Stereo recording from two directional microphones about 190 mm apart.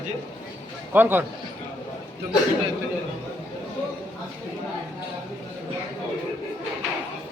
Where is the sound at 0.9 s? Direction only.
10° right (ahead or behind).